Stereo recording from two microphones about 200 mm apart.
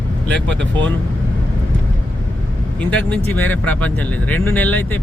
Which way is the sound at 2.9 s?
5° left (ahead or behind).